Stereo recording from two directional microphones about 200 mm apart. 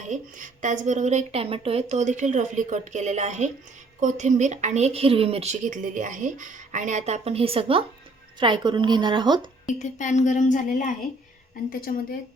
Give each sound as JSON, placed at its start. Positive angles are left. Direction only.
{"t": 0.0, "sound": "a woman's voice", "side_deg": -40}
{"t": 9.6, "sound": "speech", "side_deg": 35}